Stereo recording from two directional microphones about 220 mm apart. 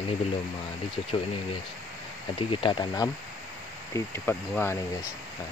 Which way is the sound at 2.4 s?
20° left (ahead or behind).